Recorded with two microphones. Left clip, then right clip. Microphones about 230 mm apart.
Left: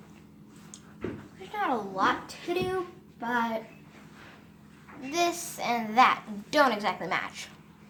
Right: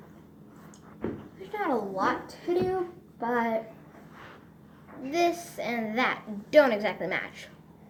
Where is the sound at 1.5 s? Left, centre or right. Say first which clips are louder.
Right 1 dB; centre.